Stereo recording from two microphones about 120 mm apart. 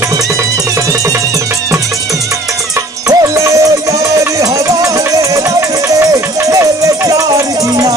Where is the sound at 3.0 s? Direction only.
25° right (ahead or behind).